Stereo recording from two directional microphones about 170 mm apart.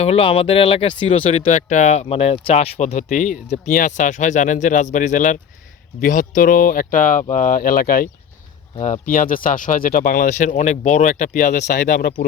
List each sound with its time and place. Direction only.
0.0 s speech: 35° left (ahead or behind); by 8.0 s 60° left (ahead or behind)
8.8 s speech: 50° left (ahead or behind)